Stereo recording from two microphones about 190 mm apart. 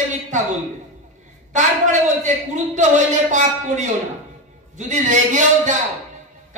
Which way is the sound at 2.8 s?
40° right (ahead or behind).